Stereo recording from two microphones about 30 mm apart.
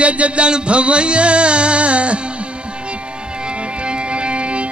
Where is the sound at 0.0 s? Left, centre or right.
Right.